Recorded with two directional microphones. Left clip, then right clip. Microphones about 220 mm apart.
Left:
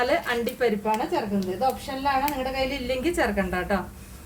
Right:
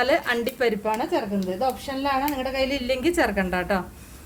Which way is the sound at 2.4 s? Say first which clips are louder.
Right 2 dB; 45° right (ahead or behind).